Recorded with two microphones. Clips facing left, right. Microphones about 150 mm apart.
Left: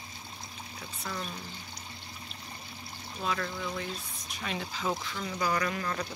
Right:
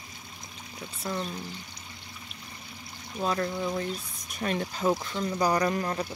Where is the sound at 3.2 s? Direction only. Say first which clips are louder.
Right 5 dB; 35° right (ahead or behind).